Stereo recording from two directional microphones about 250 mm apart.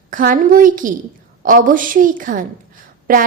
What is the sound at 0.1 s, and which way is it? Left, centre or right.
A woman's voice, right.